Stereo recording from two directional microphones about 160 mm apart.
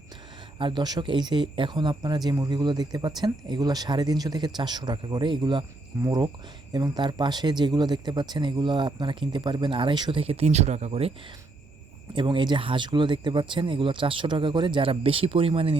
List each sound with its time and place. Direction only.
0.6 s speech: 25° right (ahead or behind)
12.1 s speech: 30° right (ahead or behind)